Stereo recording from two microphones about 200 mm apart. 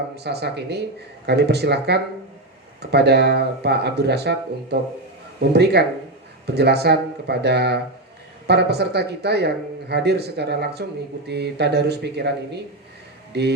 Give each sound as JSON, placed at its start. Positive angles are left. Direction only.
{"t": 0.2, "sound": "speech", "side_deg": -55}